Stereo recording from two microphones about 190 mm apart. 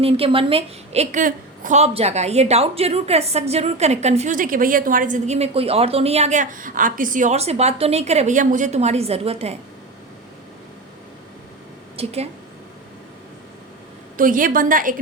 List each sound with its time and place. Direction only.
0.0 s a woman's voice: 30° right (ahead or behind)
11.9 s a woman's voice: 35° right (ahead or behind)
14.2 s a woman's voice: 45° right (ahead or behind)